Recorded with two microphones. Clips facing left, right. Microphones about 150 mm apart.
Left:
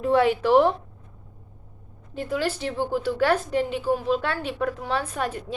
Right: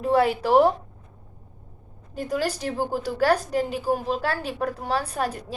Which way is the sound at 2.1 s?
40° right (ahead or behind).